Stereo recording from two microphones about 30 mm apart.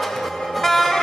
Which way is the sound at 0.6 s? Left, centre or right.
Centre.